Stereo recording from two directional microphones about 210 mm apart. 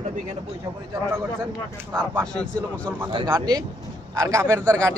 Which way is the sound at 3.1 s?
15° right (ahead or behind).